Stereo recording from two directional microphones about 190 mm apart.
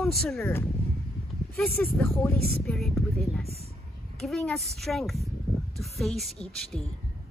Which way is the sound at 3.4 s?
35° right (ahead or behind).